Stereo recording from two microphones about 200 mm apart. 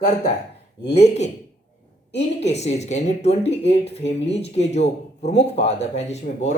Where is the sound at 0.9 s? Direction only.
30° left (ahead or behind).